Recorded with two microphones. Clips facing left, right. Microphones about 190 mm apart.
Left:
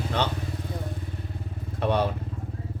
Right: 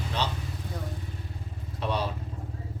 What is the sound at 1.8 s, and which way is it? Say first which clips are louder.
Vehicle: left 6 dB; 55° left (ahead or behind).